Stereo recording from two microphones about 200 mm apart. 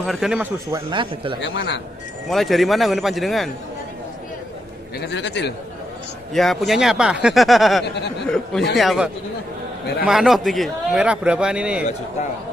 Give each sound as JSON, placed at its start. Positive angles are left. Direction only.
{"t": 0.0, "sound": "a man's voice", "side_deg": 0}
{"t": 0.7, "sound": "speech", "side_deg": -20}
{"t": 2.2, "sound": "a man's voice", "side_deg": 0}
{"t": 4.9, "sound": "a man's voice", "side_deg": 60}
{"t": 6.3, "sound": "a man's voice", "side_deg": 0}
{"t": 7.8, "sound": "a man's voice", "side_deg": 55}
{"t": 8.7, "sound": "a man's voice", "side_deg": 0}